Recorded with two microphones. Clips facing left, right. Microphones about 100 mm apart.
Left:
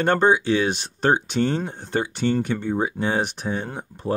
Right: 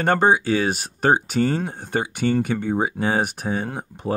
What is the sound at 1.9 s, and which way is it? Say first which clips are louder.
Speech: right 1 dB; 10° right (ahead or behind).